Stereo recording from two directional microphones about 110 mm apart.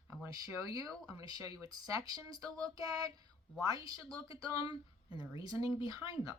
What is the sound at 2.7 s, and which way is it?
Speech, 35° right (ahead or behind).